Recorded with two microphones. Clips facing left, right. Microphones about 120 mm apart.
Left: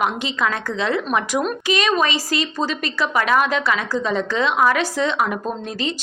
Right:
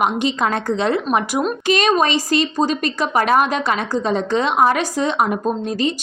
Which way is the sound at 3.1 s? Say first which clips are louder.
Right 3 dB; 35° right (ahead or behind).